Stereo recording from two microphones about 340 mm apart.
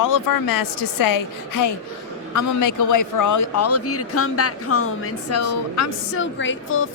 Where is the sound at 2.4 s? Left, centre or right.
Left.